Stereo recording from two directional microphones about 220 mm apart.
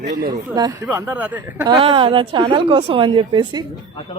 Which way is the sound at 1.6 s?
25° right (ahead or behind).